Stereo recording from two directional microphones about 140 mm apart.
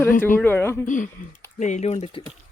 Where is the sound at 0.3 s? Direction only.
15° left (ahead or behind).